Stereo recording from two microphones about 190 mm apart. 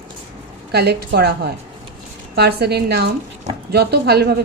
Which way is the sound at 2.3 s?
60° right (ahead or behind).